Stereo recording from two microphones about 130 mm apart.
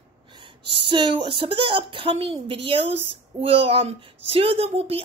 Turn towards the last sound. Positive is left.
turn(degrees=-50)  # may be behind; listen again after turning